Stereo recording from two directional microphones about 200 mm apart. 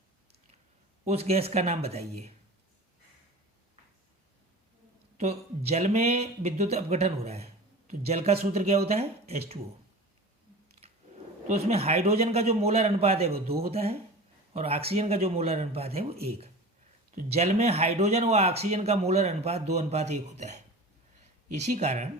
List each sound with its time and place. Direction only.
1.0 s speech: 30° right (ahead or behind)
5.2 s speech: 30° right (ahead or behind)
11.4 s speech: 30° right (ahead or behind)